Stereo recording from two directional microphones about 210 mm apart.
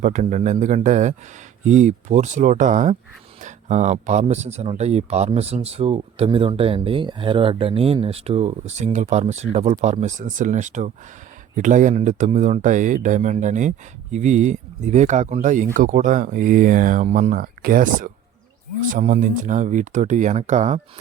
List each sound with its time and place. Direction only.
0.0 s speech: 35° right (ahead or behind)